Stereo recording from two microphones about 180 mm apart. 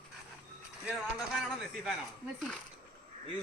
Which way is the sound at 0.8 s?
Centre (ahead or behind).